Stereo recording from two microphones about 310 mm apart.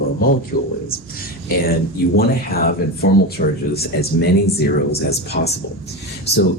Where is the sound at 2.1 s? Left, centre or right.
Left.